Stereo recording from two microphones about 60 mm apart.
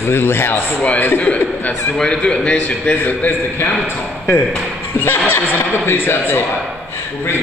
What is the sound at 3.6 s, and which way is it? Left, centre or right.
Speech, left.